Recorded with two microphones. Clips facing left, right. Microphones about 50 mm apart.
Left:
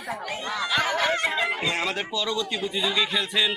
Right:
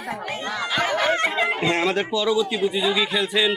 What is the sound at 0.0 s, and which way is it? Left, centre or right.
Speech, right.